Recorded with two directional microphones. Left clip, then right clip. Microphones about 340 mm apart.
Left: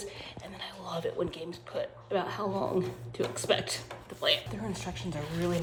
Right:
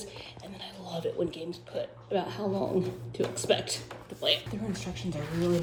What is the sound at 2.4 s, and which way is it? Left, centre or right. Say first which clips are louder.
Speech: right 1 dB; left.